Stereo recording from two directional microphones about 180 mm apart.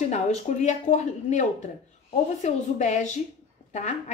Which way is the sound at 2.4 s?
40° left (ahead or behind).